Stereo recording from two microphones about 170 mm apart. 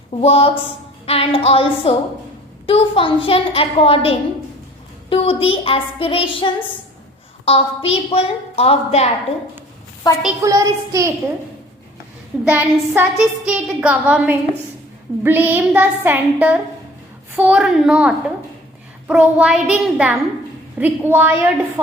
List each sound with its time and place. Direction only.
0.2 s a woman's voice: 35° left (ahead or behind)
10.0 s a woman's voice: 25° left (ahead or behind)
10.4 s child singing: 20° right (ahead or behind)
12.5 s a woman's voice: 10° right (ahead or behind)